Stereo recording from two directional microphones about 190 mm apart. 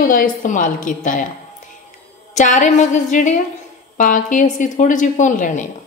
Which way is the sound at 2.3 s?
40° left (ahead or behind).